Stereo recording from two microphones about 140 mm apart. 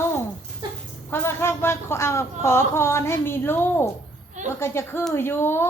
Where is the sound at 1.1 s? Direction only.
15° left (ahead or behind).